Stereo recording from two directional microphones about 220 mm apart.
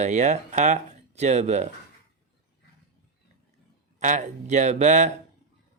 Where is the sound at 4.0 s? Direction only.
35° right (ahead or behind).